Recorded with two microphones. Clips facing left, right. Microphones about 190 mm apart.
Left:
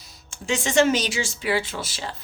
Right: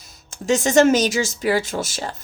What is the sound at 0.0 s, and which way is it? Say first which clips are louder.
A woman's voice: right 8 dB; 45° right (ahead or behind).